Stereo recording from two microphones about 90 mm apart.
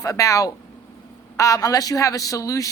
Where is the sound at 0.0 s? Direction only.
40° left (ahead or behind).